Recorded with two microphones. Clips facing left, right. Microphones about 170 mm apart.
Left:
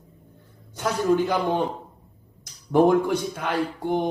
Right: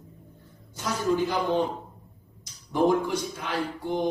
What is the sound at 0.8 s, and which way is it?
Speech, 60° left (ahead or behind).